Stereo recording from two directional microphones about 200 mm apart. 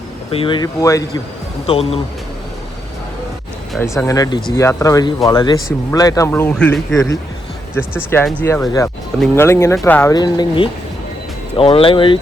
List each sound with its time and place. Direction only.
0.3 s speech: 25° left (ahead or behind)
1.6 s speech: 30° left (ahead or behind)
3.8 s speech: 15° left (ahead or behind)
6.9 s speech: 15° left (ahead or behind)